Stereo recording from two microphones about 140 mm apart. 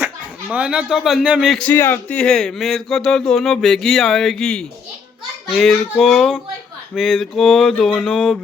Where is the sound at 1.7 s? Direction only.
15° left (ahead or behind).